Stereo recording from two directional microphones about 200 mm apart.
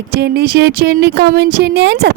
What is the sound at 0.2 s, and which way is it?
A woman's voice, 55° right (ahead or behind).